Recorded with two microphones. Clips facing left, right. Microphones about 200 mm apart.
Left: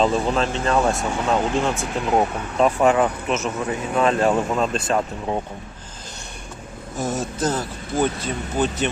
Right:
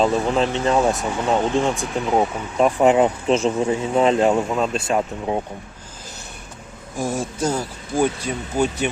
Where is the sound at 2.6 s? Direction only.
20° right (ahead or behind).